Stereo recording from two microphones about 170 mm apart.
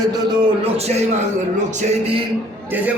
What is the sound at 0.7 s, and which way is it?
A man's voice, 40° right (ahead or behind).